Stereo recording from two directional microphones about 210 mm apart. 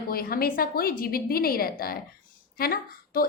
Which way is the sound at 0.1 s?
45° left (ahead or behind).